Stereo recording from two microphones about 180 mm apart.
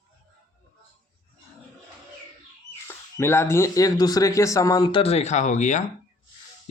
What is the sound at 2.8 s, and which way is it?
Speech, 15° left (ahead or behind).